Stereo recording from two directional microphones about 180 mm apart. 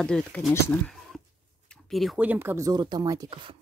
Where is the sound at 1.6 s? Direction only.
Centre (ahead or behind); by 3.6 s 25° right (ahead or behind).